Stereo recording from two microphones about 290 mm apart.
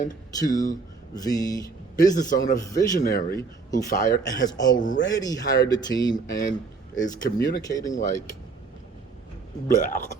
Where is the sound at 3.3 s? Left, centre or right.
Centre.